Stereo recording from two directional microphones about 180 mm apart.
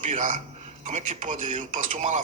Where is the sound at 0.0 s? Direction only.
45° right (ahead or behind).